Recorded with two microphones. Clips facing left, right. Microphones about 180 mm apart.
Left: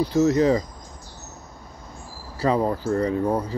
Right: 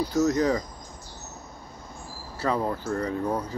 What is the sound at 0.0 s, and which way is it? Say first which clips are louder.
Speech: left 4 dB; 25° left (ahead or behind).